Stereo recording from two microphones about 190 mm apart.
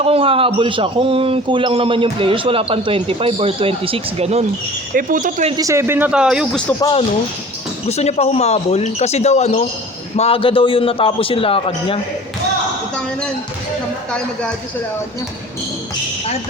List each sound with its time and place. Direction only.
0.0 s a man's voice: 30° right (ahead or behind)
4.9 s speech: 45° right (ahead or behind)
5.5 s speech: 15° right (ahead or behind)
7.9 s a man's voice: 35° left (ahead or behind)